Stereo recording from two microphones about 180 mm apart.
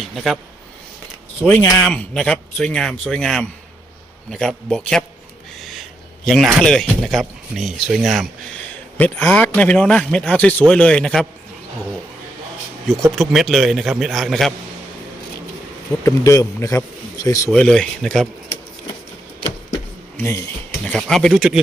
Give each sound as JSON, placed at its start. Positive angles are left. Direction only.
{"t": 0.1, "sound": "speech", "side_deg": 0}
{"t": 1.4, "sound": "speech", "side_deg": 0}
{"t": 5.5, "sound": "a sound", "side_deg": 0}
{"t": 6.2, "sound": "speech", "side_deg": 0}
{"t": 13.1, "sound": "speech", "side_deg": 0}
{"t": 16.0, "sound": "a man's voice", "side_deg": 15}
{"t": 17.5, "sound": "speech", "side_deg": 5}
{"t": 20.1, "sound": "speech", "side_deg": 15}